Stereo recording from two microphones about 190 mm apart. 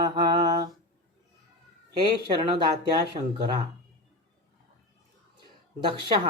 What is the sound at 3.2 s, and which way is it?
Speech, 35° right (ahead or behind).